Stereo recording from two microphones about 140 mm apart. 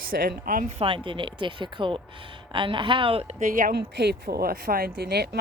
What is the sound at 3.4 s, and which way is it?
Speech, 75° right (ahead or behind).